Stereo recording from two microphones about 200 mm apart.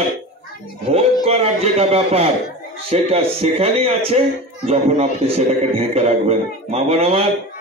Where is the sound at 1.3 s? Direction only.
30° right (ahead or behind).